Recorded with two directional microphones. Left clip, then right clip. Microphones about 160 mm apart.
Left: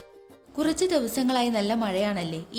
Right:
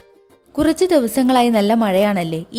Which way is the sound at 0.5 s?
55° right (ahead or behind).